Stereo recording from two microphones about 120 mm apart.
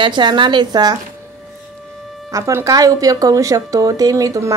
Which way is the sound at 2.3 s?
25° right (ahead or behind).